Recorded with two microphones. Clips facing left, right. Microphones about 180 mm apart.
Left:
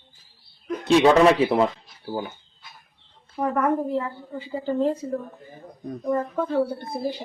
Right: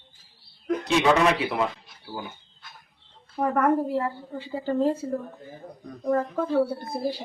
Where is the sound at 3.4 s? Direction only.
Centre (ahead or behind).